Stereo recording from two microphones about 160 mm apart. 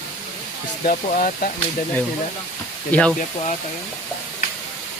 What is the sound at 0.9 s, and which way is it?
Speech, 55° left (ahead or behind).